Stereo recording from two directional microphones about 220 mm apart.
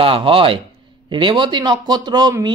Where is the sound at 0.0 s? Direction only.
25° right (ahead or behind).